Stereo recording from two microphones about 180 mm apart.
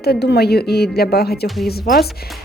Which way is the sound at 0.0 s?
65° left (ahead or behind).